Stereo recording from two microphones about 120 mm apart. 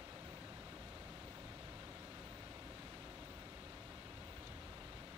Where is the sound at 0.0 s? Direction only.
35° right (ahead or behind).